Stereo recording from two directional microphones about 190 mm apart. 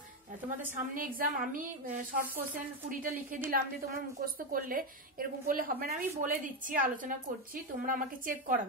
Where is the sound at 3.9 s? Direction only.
50° right (ahead or behind).